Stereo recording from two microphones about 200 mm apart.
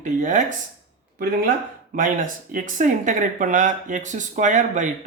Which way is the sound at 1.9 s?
40° right (ahead or behind).